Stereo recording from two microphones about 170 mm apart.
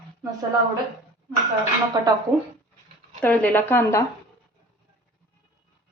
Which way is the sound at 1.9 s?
25° right (ahead or behind).